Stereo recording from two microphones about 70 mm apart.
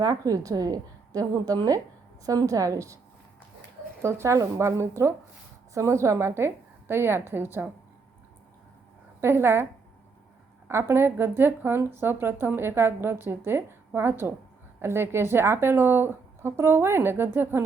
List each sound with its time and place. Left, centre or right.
0.0 s a woman's voice: right
4.0 s speech: right
9.2 s speech: right
10.7 s speech: right